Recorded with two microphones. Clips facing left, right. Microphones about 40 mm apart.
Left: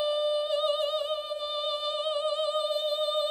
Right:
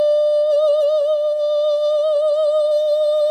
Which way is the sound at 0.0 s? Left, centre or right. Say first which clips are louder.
Right 13 dB; left.